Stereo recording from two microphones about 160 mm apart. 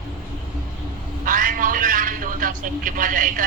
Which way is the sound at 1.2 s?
55° right (ahead or behind).